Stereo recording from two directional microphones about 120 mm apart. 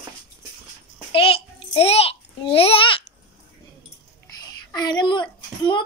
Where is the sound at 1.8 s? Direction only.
55° left (ahead or behind).